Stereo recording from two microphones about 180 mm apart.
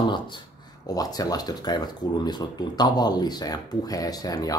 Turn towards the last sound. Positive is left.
turn(degrees=20)  # may be behind; listen again after turning